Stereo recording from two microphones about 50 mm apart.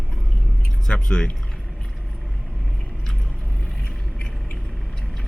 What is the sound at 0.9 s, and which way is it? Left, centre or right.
Speech, centre.